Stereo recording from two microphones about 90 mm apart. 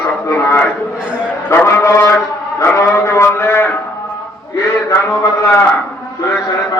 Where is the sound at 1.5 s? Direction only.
30° left (ahead or behind).